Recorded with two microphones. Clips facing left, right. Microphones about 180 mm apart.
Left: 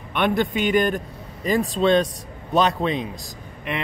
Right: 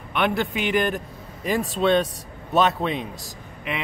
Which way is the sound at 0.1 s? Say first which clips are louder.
Left 2 dB; 5° right (ahead or behind).